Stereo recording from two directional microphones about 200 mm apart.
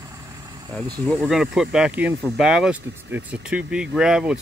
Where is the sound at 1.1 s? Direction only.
Centre (ahead or behind).